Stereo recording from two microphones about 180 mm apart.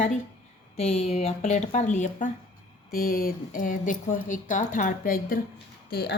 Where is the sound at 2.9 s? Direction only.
55° left (ahead or behind).